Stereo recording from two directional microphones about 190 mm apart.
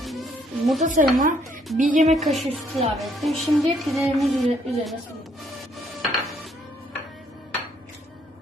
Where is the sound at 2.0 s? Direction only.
Centre (ahead or behind).